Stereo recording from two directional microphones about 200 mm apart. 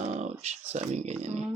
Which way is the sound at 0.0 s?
35° right (ahead or behind).